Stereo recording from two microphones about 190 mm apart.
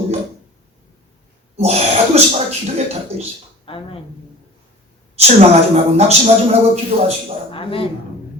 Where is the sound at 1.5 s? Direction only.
35° right (ahead or behind).